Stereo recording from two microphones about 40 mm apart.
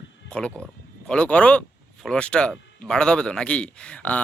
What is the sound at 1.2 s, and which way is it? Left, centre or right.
Speech, left.